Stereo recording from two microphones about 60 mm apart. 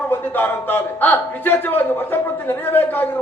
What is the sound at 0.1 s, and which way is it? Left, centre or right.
A man's voice, left.